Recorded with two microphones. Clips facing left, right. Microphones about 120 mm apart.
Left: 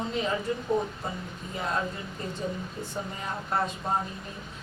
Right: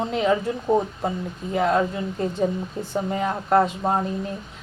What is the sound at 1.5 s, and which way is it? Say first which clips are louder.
Speech: right 11 dB; 65° right (ahead or behind).